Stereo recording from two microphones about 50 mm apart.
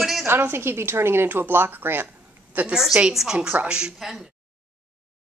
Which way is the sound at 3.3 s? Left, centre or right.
Right.